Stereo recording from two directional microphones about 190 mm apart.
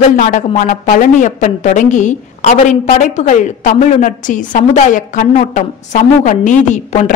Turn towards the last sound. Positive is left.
turn(degrees=40)  # may be behind; listen again after turning